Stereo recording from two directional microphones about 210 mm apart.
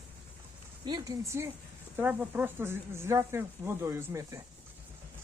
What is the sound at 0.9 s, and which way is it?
Speech, 20° right (ahead or behind).